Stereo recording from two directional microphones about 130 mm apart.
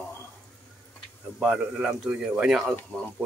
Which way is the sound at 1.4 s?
5° right (ahead or behind).